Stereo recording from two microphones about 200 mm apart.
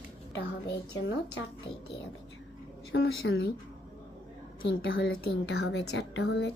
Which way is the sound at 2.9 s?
55° left (ahead or behind).